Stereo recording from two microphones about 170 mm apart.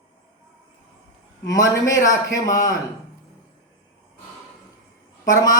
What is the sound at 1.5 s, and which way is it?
Speech, 20° left (ahead or behind).